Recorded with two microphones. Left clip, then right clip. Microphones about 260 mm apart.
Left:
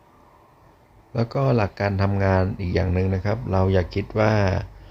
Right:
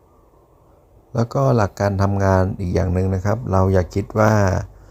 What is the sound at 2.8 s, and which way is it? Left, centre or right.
Speech, centre.